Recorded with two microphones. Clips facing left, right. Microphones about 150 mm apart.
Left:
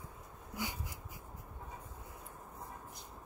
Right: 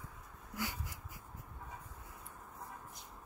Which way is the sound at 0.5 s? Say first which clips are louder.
Even; 20° left (ahead or behind).